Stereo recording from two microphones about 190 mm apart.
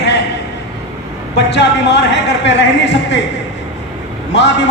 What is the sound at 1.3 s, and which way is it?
A man's voice, 65° left (ahead or behind).